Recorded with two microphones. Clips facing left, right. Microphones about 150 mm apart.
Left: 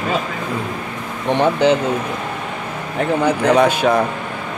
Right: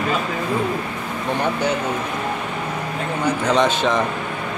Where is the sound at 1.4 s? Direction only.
30° left (ahead or behind).